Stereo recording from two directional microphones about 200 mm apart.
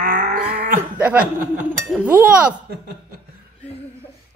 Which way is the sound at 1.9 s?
5° right (ahead or behind).